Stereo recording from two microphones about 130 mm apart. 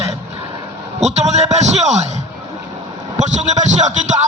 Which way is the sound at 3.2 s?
65° right (ahead or behind).